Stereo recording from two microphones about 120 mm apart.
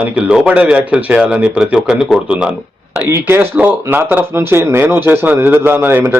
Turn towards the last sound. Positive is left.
turn(degrees=-20)  # may be behind; listen again after turning